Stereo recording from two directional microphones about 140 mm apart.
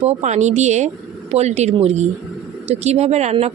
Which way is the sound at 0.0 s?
50° right (ahead or behind).